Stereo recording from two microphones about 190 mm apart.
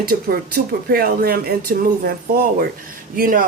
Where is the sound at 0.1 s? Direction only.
50° right (ahead or behind).